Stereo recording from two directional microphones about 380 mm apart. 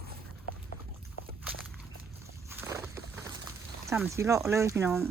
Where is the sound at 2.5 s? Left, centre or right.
Centre.